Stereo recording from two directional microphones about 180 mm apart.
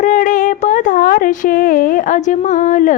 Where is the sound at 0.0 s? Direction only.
45° left (ahead or behind).